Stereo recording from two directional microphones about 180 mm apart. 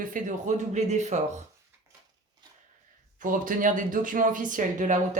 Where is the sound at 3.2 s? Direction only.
45° right (ahead or behind).